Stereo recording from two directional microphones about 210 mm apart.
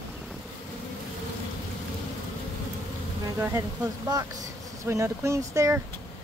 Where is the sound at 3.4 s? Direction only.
15° right (ahead or behind).